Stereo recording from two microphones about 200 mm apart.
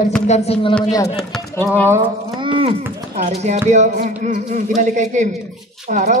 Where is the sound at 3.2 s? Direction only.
35° right (ahead or behind).